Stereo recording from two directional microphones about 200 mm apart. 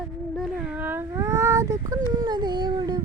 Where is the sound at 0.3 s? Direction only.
5° right (ahead or behind); by 3.0 s 20° right (ahead or behind).